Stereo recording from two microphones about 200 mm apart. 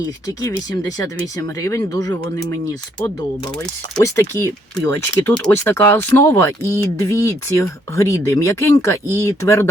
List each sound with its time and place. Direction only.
0.7 s speech: 15° left (ahead or behind)